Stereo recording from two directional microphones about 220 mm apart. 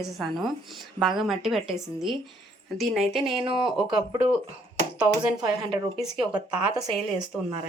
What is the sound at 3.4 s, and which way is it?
Speech, 20° right (ahead or behind).